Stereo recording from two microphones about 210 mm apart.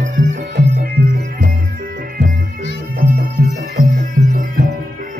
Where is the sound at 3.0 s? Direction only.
45° right (ahead or behind).